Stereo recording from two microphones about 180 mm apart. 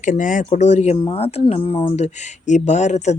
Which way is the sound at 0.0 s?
45° left (ahead or behind).